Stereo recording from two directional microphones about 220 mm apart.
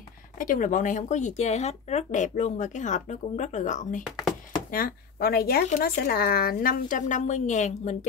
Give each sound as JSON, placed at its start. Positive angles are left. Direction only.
{"t": 0.4, "sound": "speech", "side_deg": 35}